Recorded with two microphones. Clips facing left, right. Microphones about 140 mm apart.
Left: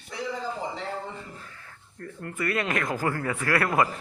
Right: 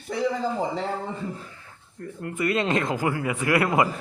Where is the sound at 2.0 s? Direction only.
20° right (ahead or behind).